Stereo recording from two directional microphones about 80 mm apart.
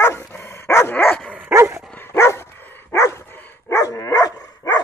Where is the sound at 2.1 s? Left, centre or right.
Left.